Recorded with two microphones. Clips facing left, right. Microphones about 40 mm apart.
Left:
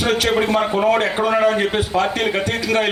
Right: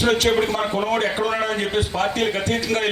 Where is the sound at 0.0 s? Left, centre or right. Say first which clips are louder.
Left 1 dB; centre.